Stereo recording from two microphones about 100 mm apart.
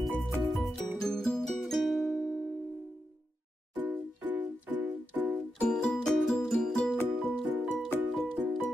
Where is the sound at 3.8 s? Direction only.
15° right (ahead or behind).